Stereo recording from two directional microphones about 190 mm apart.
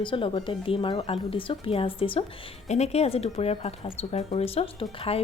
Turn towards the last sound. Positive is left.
turn(degrees=30)  # may be behind; listen again after turning